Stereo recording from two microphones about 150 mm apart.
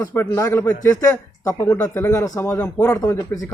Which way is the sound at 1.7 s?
20° left (ahead or behind).